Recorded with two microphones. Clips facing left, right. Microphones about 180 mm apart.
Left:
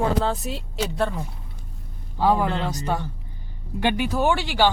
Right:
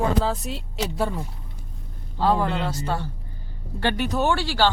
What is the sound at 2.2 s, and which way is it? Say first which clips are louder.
Speech: left 1 dB; 15° left (ahead or behind).